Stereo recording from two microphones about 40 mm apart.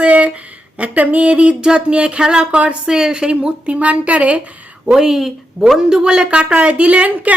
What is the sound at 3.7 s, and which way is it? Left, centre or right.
Speech, right.